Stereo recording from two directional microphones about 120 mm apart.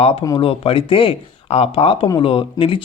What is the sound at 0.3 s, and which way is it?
Speech, 50° left (ahead or behind).